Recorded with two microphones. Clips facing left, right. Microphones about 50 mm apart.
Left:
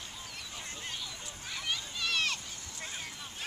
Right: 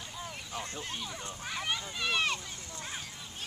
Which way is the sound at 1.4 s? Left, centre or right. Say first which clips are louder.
Right 2 dB; right.